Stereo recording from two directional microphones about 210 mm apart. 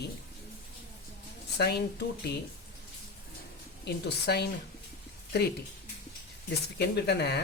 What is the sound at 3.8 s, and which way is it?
Speech, 50° left (ahead or behind).